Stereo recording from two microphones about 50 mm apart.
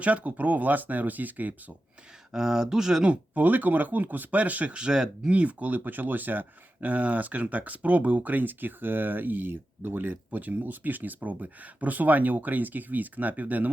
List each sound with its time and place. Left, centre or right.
0.0 s speech: right
2.3 s speech: centre
3.1 s speech: right; by 5.3 s centre
5.3 s speech: right